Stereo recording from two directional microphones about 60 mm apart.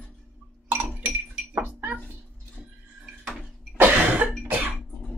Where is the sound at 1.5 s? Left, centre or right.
Right.